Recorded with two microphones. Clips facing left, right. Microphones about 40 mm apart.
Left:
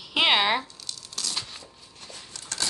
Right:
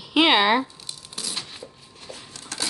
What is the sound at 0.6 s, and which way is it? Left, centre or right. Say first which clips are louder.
Tearing: right 7 dB; centre.